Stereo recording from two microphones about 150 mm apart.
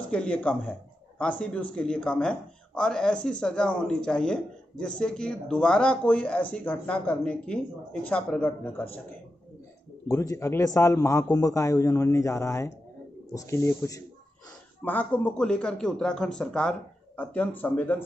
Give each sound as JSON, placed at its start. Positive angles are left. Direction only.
{"t": 0.1, "sound": "speech", "side_deg": 10}
{"t": 0.7, "sound": "a sound", "side_deg": 10}
{"t": 1.4, "sound": "speech", "side_deg": 10}
{"t": 10.0, "sound": "a man's voice", "side_deg": 20}
{"t": 14.9, "sound": "speech", "side_deg": 10}